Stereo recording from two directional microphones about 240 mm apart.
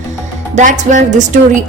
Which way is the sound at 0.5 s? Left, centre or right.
Right.